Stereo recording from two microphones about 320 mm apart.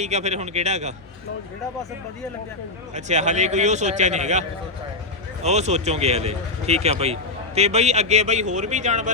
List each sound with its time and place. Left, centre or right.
0.0 s speech: right
2.9 s speech: right